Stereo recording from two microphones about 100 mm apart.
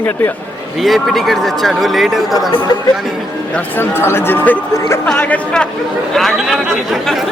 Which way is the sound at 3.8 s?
25° left (ahead or behind).